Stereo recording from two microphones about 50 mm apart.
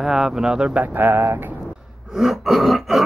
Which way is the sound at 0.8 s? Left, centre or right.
Right.